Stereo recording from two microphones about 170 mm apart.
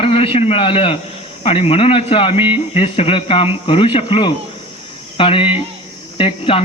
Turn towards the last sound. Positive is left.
turn(degrees=35)  # may be behind; listen again after turning